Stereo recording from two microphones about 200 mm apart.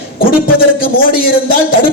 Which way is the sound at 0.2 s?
45° left (ahead or behind).